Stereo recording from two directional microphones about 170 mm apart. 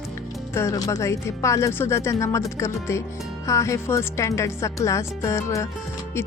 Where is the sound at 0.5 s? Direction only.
20° left (ahead or behind).